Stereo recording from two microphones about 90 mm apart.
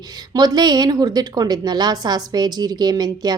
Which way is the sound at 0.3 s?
50° right (ahead or behind).